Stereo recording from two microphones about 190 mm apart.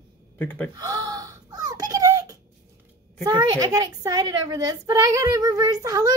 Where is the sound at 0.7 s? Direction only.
20° right (ahead or behind).